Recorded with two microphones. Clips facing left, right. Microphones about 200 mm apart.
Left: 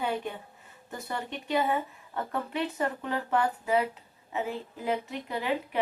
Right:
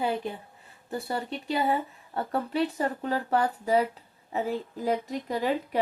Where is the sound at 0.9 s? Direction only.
35° right (ahead or behind).